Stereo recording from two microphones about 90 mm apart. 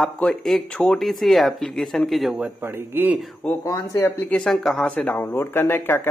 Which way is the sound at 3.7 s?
30° left (ahead or behind).